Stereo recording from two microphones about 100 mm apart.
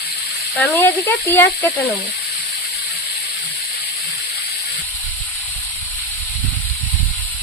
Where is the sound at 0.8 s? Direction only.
20° left (ahead or behind).